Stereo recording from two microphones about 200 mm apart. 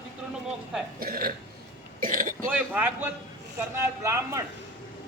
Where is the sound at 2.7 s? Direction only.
10° right (ahead or behind).